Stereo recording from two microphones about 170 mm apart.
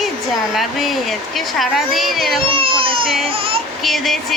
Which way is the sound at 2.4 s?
30° right (ahead or behind).